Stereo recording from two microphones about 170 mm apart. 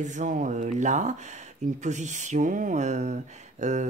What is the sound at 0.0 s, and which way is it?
Speech, 45° right (ahead or behind).